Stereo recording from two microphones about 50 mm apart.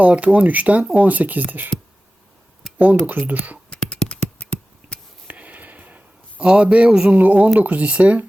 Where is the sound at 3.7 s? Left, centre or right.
Centre.